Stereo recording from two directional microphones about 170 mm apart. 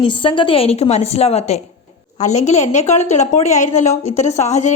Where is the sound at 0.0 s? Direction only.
30° left (ahead or behind).